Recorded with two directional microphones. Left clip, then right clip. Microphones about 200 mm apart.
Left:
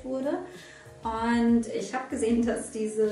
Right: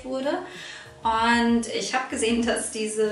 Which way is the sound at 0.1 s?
5° left (ahead or behind).